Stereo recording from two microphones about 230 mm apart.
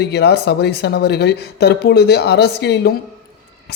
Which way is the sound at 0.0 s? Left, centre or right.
Left.